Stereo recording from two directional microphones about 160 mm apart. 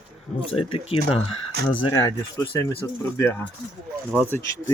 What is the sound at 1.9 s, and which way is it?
Speech, 20° left (ahead or behind).